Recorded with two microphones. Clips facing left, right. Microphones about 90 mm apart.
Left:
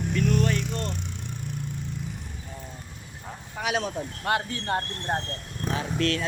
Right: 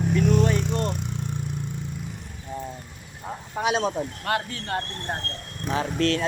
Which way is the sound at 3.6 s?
25° right (ahead or behind).